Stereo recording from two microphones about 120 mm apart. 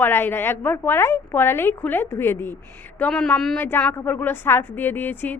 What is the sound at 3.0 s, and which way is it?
Speech, 5° left (ahead or behind).